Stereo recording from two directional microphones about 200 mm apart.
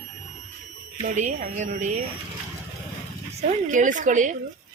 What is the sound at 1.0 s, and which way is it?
A woman's voice, 35° right (ahead or behind).